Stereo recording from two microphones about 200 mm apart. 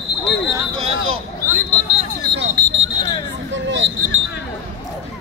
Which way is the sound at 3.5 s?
65° right (ahead or behind).